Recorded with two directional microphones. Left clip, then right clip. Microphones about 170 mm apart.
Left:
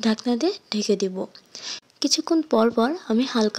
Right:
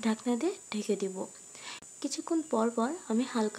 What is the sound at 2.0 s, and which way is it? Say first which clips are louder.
Speech: left 11 dB; 40° left (ahead or behind).